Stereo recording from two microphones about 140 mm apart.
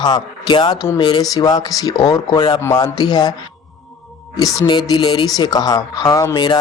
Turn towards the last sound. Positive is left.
turn(degrees=30)  # may be behind; listen again after turning